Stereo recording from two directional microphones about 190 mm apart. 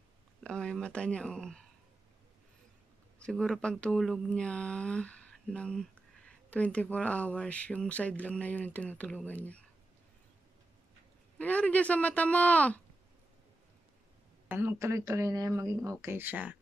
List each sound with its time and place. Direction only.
0.4 s speech: 5° left (ahead or behind)
3.2 s speech: 5° left (ahead or behind)
11.3 s speech: 5° left (ahead or behind)
14.5 s speech: 10° right (ahead or behind)